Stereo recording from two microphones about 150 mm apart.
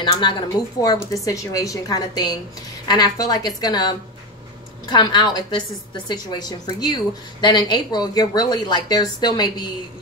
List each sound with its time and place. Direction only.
0.0 s a woman's voice: 30° left (ahead or behind)
4.8 s a woman's voice: 30° left (ahead or behind)